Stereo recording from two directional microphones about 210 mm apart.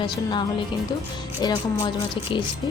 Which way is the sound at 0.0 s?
20° left (ahead or behind).